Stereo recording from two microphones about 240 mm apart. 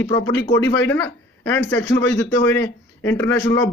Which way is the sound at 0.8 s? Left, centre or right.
Centre.